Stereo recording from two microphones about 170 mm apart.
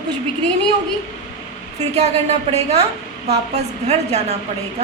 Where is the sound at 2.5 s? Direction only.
40° right (ahead or behind).